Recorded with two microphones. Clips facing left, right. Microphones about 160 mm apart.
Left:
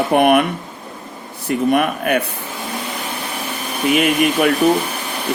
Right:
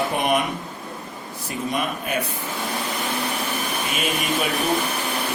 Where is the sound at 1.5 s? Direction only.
65° left (ahead or behind).